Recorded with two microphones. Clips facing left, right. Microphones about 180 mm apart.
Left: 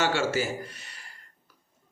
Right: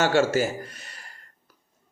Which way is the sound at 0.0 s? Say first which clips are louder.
Right 5 dB; 45° right (ahead or behind).